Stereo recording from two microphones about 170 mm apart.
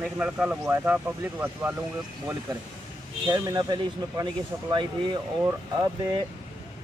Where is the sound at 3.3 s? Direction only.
20° right (ahead or behind).